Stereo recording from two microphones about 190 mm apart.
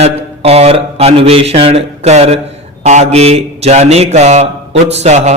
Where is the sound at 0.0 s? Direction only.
30° right (ahead or behind).